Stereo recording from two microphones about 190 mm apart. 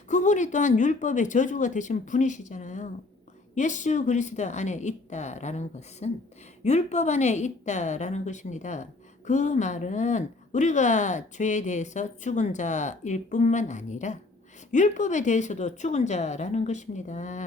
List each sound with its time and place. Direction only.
0.1 s a woman's voice: 40° left (ahead or behind)